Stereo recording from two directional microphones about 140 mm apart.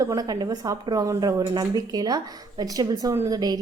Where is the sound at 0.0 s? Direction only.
25° right (ahead or behind).